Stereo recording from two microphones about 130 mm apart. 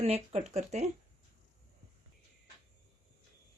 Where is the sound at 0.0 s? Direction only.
60° right (ahead or behind).